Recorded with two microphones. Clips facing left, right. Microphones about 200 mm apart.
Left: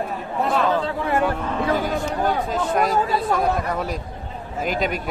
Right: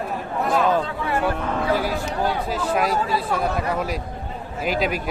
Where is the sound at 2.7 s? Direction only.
Centre (ahead or behind).